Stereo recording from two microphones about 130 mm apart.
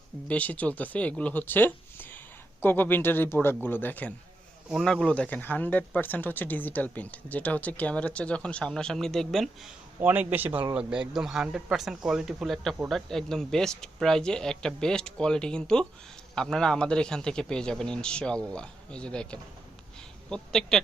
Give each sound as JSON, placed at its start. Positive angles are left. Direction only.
{"t": 0.3, "sound": "speech", "side_deg": 10}
{"t": 4.7, "sound": "speech", "side_deg": 0}
{"t": 10.0, "sound": "a man's voice", "side_deg": -15}